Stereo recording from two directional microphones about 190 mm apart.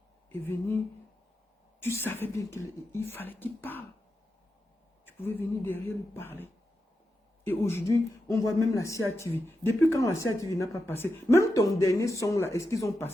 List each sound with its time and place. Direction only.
0.3 s speech: 10° left (ahead or behind)
1.8 s speech: 10° left (ahead or behind)
5.0 s speech: 10° left (ahead or behind)